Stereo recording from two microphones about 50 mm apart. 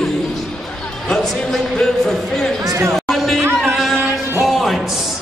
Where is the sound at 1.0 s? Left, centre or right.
Centre.